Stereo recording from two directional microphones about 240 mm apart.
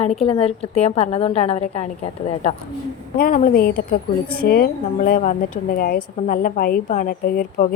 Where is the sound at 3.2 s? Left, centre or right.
Left.